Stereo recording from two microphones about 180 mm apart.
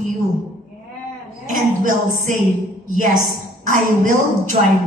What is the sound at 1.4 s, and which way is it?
Music, 45° right (ahead or behind).